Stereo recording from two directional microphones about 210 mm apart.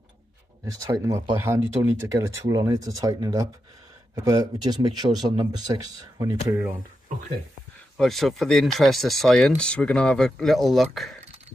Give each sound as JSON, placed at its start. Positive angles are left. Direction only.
{"t": 0.9, "sound": "speech", "side_deg": -15}
{"t": 8.0, "sound": "speech", "side_deg": 0}